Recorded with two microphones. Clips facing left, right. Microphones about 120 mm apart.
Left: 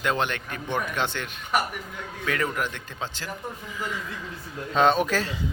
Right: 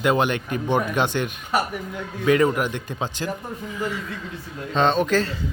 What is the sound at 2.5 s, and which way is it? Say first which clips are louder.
Speech: right 5 dB; 15° right (ahead or behind).